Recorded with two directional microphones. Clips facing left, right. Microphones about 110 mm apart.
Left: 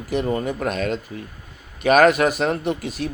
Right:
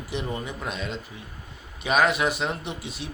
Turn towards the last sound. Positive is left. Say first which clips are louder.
# left 10 dB
turn(degrees=45)  # may be behind; listen again after turning